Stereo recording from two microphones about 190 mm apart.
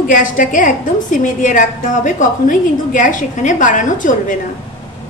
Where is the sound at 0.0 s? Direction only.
45° left (ahead or behind).